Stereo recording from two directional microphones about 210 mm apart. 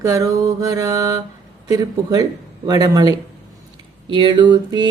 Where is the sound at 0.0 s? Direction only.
15° right (ahead or behind).